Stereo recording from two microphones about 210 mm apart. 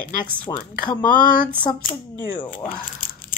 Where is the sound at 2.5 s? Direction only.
40° left (ahead or behind).